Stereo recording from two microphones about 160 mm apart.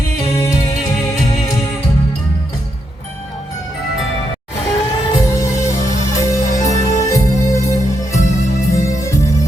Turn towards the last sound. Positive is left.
turn(degrees=20)  # may be behind; listen again after turning